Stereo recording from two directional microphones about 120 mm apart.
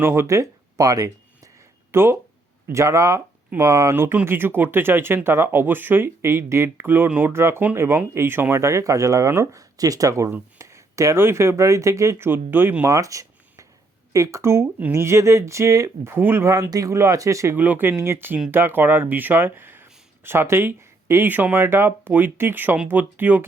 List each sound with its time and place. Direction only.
0.0 s speech: 20° right (ahead or behind)